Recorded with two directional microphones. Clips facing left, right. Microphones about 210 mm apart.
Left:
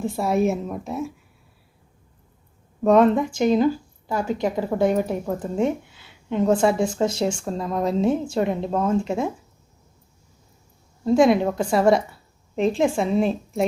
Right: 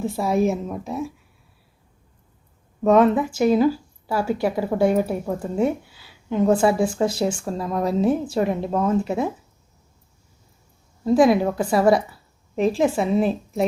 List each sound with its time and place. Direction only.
0.0 s a woman's voice: centre (ahead or behind)
2.8 s a woman's voice: centre (ahead or behind)
5.9 s a sound: 25° left (ahead or behind)
6.6 s a woman's voice: 5° right (ahead or behind)
11.0 s a woman's voice: 5° right (ahead or behind)